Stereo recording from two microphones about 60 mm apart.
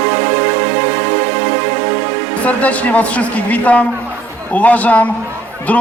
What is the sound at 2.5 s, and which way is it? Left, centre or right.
A man's voice, left.